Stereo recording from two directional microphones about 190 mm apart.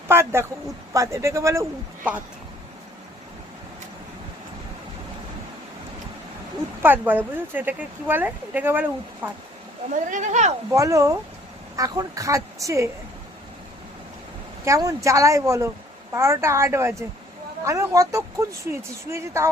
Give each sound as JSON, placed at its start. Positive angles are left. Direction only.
{"t": 0.1, "sound": "a woman's voice", "side_deg": -10}
{"t": 6.8, "sound": "a woman's voice", "side_deg": -10}
{"t": 10.1, "sound": "speech", "side_deg": -40}
{"t": 10.7, "sound": "a woman's voice", "side_deg": -15}
{"t": 14.6, "sound": "a woman's voice", "side_deg": -15}